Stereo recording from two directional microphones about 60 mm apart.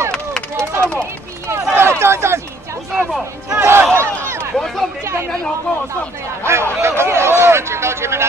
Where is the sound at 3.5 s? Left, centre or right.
Right.